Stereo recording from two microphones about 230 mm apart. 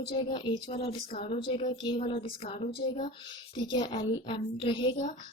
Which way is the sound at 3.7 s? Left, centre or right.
Centre.